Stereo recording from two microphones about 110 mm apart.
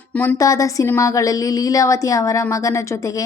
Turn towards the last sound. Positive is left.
turn(degrees=30)  # may be behind; listen again after turning